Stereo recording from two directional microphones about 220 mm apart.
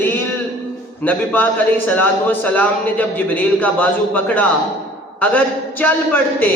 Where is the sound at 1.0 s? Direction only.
5° left (ahead or behind).